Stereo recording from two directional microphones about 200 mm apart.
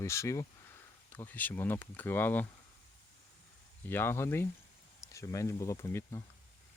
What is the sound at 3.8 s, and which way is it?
Speech, 10° left (ahead or behind).